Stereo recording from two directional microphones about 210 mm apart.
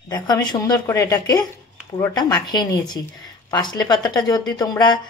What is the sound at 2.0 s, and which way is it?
Speech, 20° left (ahead or behind).